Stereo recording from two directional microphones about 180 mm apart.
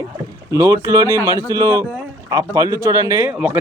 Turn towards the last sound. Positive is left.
turn(degrees=-10)  # may be behind; listen again after turning